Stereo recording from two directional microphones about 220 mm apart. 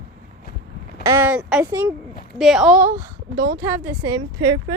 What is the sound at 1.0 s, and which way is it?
Speech, 10° right (ahead or behind).